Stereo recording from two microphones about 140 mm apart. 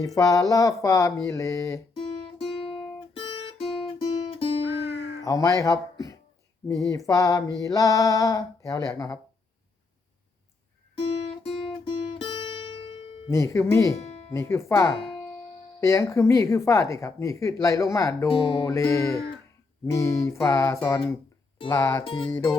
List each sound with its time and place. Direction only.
0.0 s speech: 25° left (ahead or behind)
2.5 s guitar: 40° left (ahead or behind)
5.2 s speech: 25° left (ahead or behind)
11.4 s guitar: 40° left (ahead or behind)
12.2 s music: 35° left (ahead or behind)
13.3 s speech: 20° left (ahead or behind)
14.9 s music: 40° left (ahead or behind)
15.8 s speech: 20° left (ahead or behind)
18.3 s music: 35° left (ahead or behind)
18.7 s speech: 20° left (ahead or behind)
22.0 s music: 40° left (ahead or behind)
22.3 s music: 15° left (ahead or behind)